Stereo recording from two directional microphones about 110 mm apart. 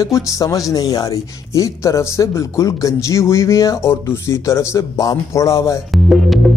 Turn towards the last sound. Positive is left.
turn(degrees=0)  # may be behind; listen again after turning